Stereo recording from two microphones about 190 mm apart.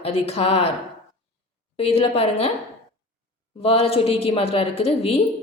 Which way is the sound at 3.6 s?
30° left (ahead or behind).